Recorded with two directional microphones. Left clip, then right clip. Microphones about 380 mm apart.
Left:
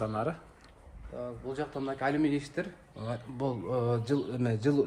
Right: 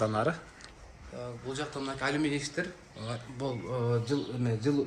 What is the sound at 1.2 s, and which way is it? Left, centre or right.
Speech, left.